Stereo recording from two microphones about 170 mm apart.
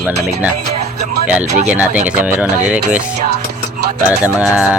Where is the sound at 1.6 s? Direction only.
10° right (ahead or behind).